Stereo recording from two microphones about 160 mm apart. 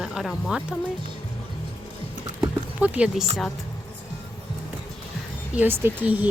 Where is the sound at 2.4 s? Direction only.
10° right (ahead or behind).